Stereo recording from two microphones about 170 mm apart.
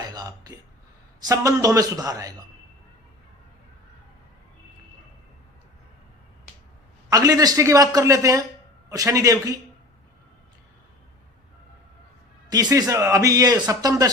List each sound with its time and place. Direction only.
0.0 s a sound: 20° right (ahead or behind)
1.2 s a man's voice: 20° right (ahead or behind)
7.1 s a man's voice: 20° right (ahead or behind)
12.5 s a man's voice: 25° right (ahead or behind)